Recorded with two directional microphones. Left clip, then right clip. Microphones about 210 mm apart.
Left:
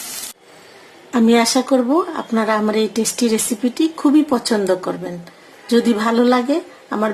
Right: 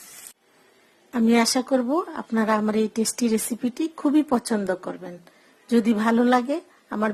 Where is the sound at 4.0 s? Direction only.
25° right (ahead or behind).